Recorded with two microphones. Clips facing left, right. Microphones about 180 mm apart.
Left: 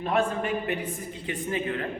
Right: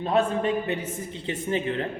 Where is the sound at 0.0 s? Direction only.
25° right (ahead or behind).